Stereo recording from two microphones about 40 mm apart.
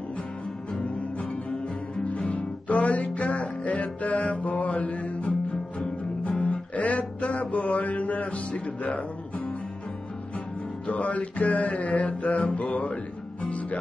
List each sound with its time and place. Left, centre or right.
2.0 s music: left
10.9 s music: left